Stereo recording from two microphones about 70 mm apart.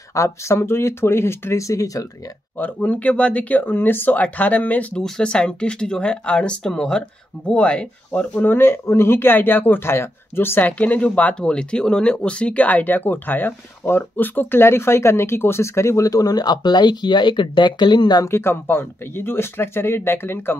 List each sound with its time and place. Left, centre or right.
0.1 s speech: left
2.5 s speech: left
4.9 s speech: centre
8.5 s speech: left
10.7 s speech: centre; by 16.1 s left
16.1 s speech: left
18.2 s speech: left